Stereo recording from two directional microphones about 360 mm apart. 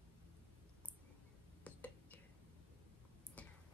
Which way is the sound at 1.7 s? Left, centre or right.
Centre.